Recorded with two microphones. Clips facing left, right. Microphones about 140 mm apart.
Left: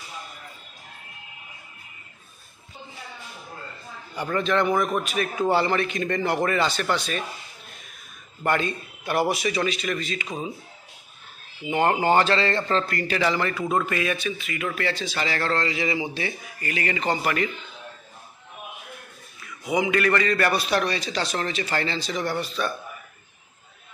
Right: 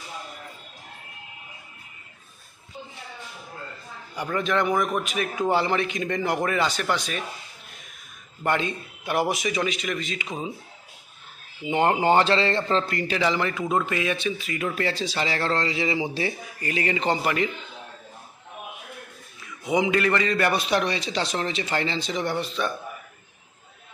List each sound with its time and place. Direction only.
4.1 s a man's voice: 15° right (ahead or behind)
8.5 s a man's voice: 15° right (ahead or behind)
11.6 s a man's voice: 25° right (ahead or behind)
19.4 s a man's voice: 25° right (ahead or behind)